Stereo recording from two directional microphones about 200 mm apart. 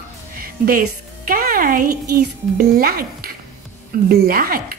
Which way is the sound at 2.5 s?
45° right (ahead or behind).